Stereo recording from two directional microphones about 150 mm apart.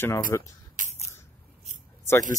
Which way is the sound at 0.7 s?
60° right (ahead or behind).